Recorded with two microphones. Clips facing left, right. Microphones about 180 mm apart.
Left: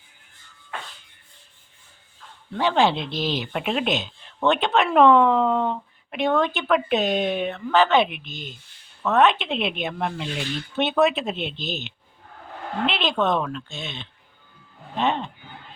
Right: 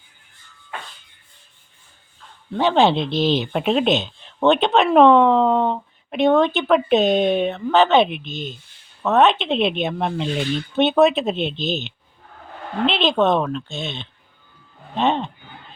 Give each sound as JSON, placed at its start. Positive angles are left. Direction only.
{"t": 2.6, "sound": "speech", "side_deg": -25}